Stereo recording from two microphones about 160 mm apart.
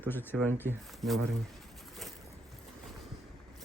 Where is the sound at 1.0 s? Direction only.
Centre (ahead or behind).